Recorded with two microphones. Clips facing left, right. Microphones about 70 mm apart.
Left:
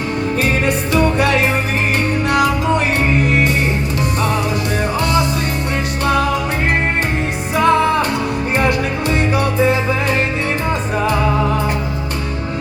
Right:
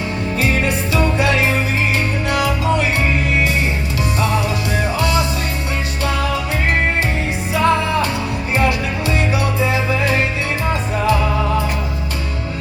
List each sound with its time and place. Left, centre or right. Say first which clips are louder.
0.9 s music: left 2 dB; left
4.8 s music: left 1 dB; left
7.5 s music: left 3 dB; left